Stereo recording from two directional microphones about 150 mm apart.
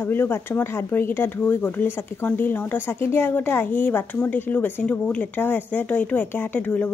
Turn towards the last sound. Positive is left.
turn(degrees=10)  # may be behind; listen again after turning